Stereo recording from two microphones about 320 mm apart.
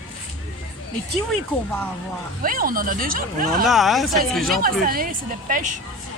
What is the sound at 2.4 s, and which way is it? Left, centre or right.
A woman's voice, right.